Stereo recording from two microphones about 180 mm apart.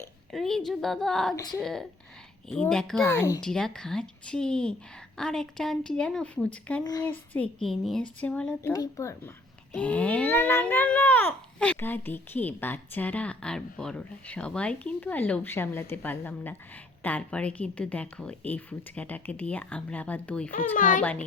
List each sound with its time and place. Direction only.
0.3 s a woman's voice: centre (ahead or behind)
3.1 s a woman's voice: 20° left (ahead or behind)
3.4 s a woman's voice: 5° left (ahead or behind)
8.7 s a child's voice: 20° left (ahead or behind)
20.7 s a child's voice: 50° left (ahead or behind)
21.0 s a child's voice: 10° left (ahead or behind)